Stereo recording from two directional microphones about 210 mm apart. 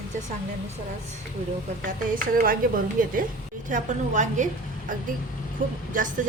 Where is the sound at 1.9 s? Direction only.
40° right (ahead or behind).